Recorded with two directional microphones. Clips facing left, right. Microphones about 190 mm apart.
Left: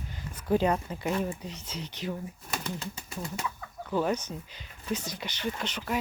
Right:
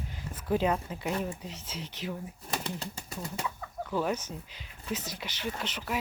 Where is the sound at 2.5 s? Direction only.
30° right (ahead or behind).